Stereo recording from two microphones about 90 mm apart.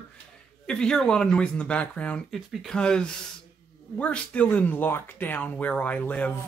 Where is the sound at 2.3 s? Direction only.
Centre (ahead or behind).